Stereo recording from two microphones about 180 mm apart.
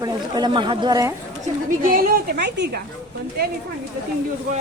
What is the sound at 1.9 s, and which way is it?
Speech, 60° right (ahead or behind).